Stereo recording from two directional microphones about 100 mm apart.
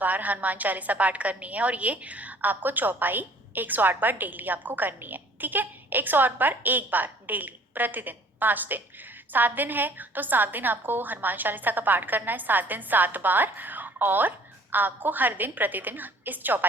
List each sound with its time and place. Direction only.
0.0 s a woman's voice: 15° right (ahead or behind)